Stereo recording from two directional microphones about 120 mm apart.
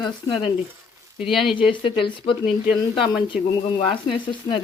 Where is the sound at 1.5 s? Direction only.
45° left (ahead or behind).